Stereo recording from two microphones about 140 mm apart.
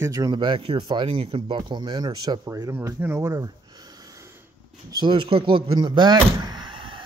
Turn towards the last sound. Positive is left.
turn(degrees=-35)  # may be behind; listen again after turning